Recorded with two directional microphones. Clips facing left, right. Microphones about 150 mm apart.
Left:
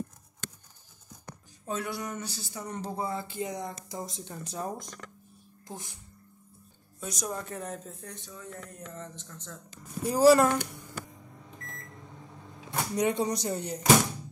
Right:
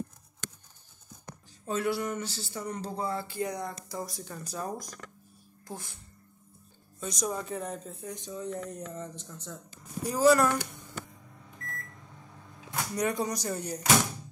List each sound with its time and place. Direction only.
1.7 s speech: 15° left (ahead or behind)
7.0 s speech: 5° left (ahead or behind)
8.1 s speech: 20° right (ahead or behind)
10.0 s speech: 30° left (ahead or behind)
12.7 s speech: 25° left (ahead or behind)